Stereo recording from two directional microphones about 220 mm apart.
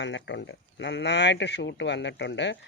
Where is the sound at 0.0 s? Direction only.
50° left (ahead or behind).